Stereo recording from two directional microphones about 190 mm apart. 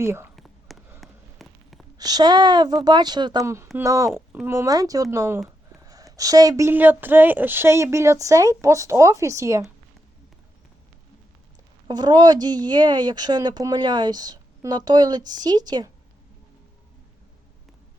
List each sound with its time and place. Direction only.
0.0 s speech: 15° right (ahead or behind)
0.3 s whispering: centre (ahead or behind)
1.0 s a sound: centre (ahead or behind)
2.0 s a woman's voice: 20° right (ahead or behind)
11.9 s a woman's voice: 20° right (ahead or behind)